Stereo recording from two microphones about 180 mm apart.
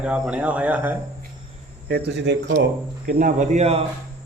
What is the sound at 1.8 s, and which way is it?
Speech, 65° right (ahead or behind).